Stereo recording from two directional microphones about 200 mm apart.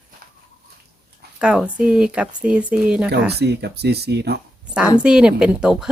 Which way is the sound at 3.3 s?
55° right (ahead or behind).